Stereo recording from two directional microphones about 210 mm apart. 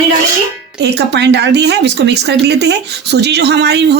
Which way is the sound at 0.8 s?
55° right (ahead or behind).